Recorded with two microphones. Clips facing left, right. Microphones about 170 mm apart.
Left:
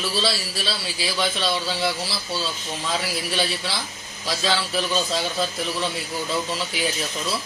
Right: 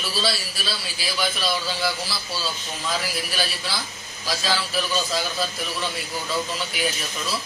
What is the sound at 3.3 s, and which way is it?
Speech, 25° left (ahead or behind).